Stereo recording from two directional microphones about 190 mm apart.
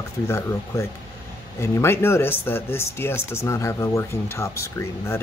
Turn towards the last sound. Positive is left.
turn(degrees=15)  # may be behind; listen again after turning